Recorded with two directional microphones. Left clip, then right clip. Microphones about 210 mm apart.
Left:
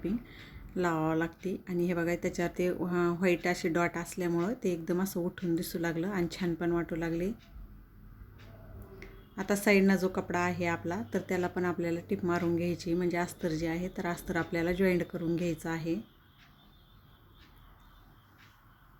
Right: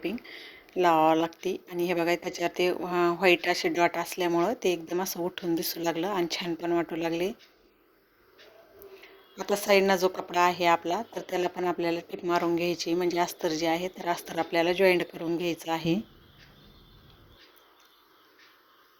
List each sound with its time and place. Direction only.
0.7 s speech: 25° right (ahead or behind)
9.3 s speech: 20° right (ahead or behind)